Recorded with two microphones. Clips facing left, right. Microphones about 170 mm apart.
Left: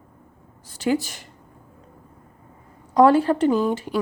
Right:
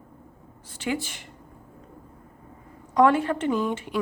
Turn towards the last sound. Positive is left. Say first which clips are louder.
# left 4 dB
turn(degrees=35)  # may be behind; listen again after turning